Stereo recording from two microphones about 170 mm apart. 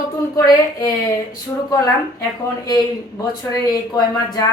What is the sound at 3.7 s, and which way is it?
Speech, 25° left (ahead or behind).